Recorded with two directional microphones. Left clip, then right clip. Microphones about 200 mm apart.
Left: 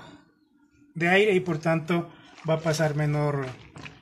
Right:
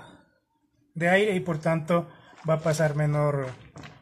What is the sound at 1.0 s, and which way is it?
Speech, 10° right (ahead or behind).